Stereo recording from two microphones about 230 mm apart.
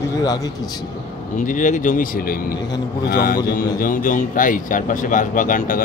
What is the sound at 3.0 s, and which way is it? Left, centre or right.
A man's voice, left.